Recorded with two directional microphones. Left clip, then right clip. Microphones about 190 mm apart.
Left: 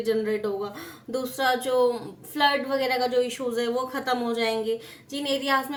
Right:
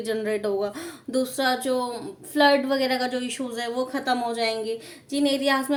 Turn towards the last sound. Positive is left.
turn(degrees=-35)  # may be behind; listen again after turning